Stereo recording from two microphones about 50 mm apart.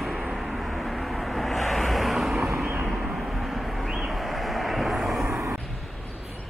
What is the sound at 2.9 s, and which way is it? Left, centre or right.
Vehicle, centre.